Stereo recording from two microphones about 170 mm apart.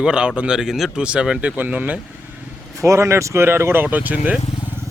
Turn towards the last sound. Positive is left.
turn(degrees=-10)  # may be behind; listen again after turning